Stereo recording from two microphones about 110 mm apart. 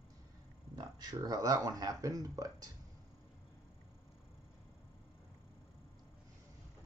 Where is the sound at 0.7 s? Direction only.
35° right (ahead or behind).